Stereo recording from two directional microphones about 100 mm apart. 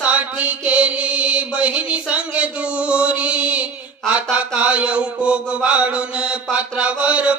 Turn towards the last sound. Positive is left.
turn(degrees=-10)  # may be behind; listen again after turning